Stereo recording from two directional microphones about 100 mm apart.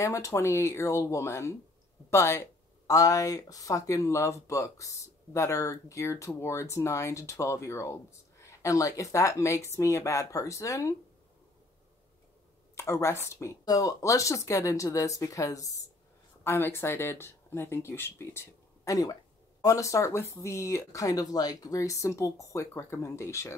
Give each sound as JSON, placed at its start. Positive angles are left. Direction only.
{"t": 0.0, "sound": "speech", "side_deg": 30}
{"t": 12.7, "sound": "speech", "side_deg": 30}
{"t": 18.9, "sound": "speech", "side_deg": 35}